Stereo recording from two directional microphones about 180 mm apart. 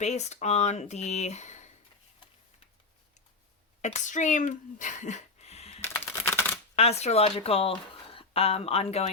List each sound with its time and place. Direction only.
0.0 s speech: 40° left (ahead or behind)
3.8 s speech: 40° left (ahead or behind)
5.8 s computer keyboard: 10° left (ahead or behind)
6.7 s speech: 35° left (ahead or behind)